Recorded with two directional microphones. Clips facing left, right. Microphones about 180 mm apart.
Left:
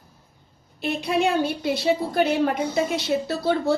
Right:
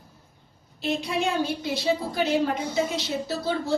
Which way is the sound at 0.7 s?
60° left (ahead or behind).